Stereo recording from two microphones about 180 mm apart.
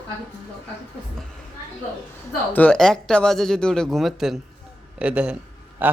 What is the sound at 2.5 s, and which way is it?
A man's voice, 5° left (ahead or behind).